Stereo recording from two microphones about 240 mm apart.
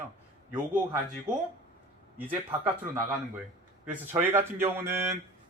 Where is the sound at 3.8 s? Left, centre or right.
Centre.